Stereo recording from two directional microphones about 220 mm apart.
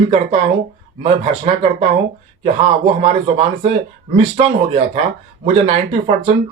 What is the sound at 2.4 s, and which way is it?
Speech, 25° right (ahead or behind).